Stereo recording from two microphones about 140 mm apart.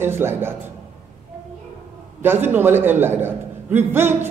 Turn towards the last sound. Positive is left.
turn(degrees=-15)  # may be behind; listen again after turning